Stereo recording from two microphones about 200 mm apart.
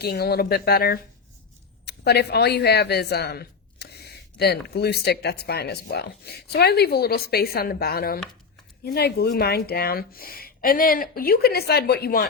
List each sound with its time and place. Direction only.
0.0 s speech: 50° left (ahead or behind)